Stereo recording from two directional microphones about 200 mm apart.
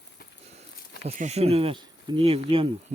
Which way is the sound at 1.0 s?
35° right (ahead or behind).